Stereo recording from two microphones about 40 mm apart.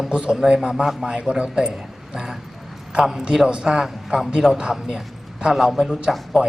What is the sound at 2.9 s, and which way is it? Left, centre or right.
A man's voice, centre.